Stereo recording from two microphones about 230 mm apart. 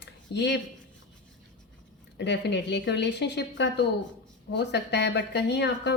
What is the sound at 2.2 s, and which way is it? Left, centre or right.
A woman's voice, left.